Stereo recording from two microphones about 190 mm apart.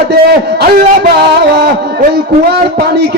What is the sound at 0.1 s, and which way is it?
A man's voice, 55° right (ahead or behind).